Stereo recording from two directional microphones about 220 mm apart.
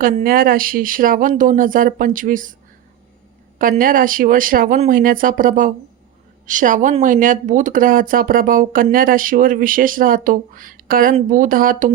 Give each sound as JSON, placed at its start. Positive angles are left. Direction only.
{"t": 0.0, "sound": "speech", "side_deg": -40}
{"t": 3.6, "sound": "speech", "side_deg": -40}